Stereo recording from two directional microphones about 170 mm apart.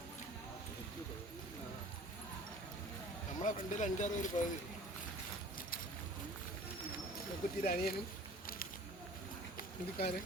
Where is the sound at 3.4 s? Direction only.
50° left (ahead or behind).